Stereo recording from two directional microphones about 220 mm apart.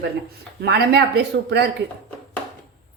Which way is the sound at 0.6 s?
50° right (ahead or behind).